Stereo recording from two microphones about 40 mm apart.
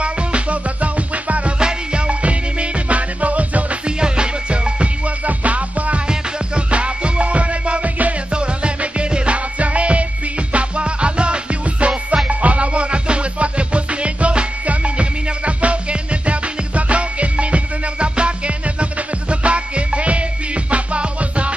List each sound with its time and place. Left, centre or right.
0.0 s music: right
1.6 s music: right
3.8 s music: right
6.0 s music: right